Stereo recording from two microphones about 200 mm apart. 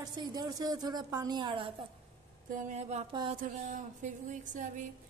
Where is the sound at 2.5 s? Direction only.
35° right (ahead or behind).